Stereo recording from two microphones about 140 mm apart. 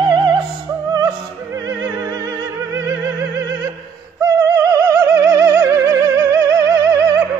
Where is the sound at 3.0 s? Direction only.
25° right (ahead or behind).